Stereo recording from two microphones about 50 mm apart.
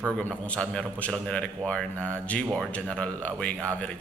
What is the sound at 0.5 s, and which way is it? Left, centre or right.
Speech, centre.